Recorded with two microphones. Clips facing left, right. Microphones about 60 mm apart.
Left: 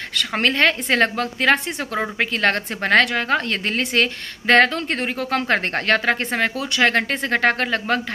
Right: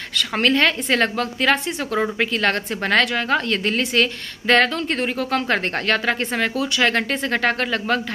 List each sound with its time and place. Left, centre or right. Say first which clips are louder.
0.4 s a woman's voice: even; left